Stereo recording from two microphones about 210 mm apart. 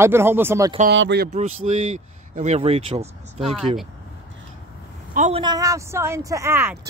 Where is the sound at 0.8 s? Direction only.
55° right (ahead or behind).